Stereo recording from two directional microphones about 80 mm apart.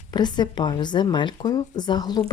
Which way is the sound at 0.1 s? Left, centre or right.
Left.